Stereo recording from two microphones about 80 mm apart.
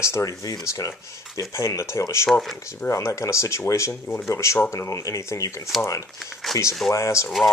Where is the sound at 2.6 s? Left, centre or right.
Left.